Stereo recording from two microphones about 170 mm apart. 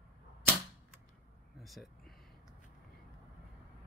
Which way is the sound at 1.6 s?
Centre (ahead or behind).